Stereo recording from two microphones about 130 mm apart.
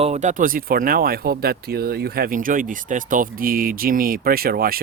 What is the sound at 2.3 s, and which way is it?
Speech, 90° right.